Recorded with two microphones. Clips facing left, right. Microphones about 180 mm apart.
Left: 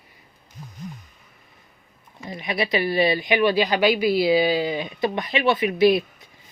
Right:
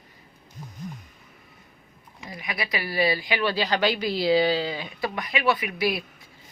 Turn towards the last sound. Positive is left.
turn(degrees=25)  # may be behind; listen again after turning